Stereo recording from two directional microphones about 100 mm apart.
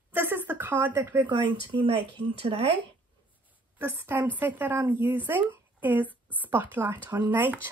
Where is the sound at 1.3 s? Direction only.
55° right (ahead or behind).